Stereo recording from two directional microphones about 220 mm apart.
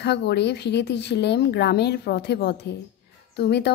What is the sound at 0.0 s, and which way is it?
Speech, 50° left (ahead or behind).